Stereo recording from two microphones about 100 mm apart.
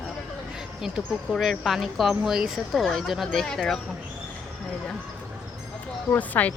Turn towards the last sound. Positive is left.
turn(degrees=15)  # may be behind; listen again after turning